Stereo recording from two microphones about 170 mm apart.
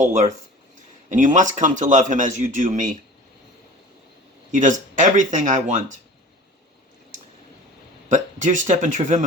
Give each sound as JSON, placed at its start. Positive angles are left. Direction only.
{"t": 0.0, "sound": "speech", "side_deg": -45}
{"t": 4.5, "sound": "speech", "side_deg": -50}
{"t": 8.1, "sound": "speech", "side_deg": -45}